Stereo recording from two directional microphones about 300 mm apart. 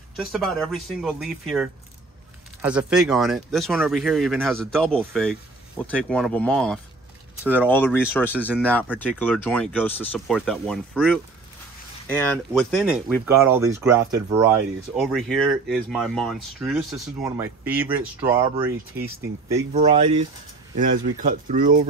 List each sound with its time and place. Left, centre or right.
0.1 s speech: centre
19.7 s speech: right